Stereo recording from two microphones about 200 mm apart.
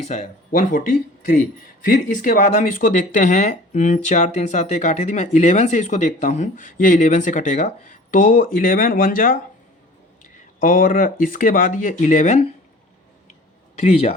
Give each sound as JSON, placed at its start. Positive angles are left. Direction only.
{"t": 0.1, "sound": "speech", "side_deg": 40}
{"t": 1.8, "sound": "speech", "side_deg": 40}
{"t": 13.7, "sound": "speech", "side_deg": 30}